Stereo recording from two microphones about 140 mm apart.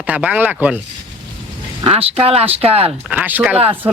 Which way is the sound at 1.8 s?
45° right (ahead or behind).